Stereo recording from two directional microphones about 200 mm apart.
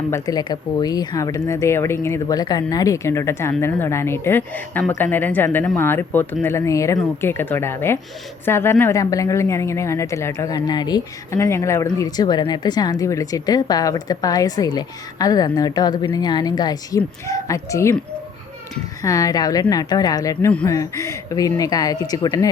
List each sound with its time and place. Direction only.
0.1 s a woman's voice: 20° left (ahead or behind)
19.0 s speech: 15° left (ahead or behind)
20.5 s a woman's voice: 5° left (ahead or behind)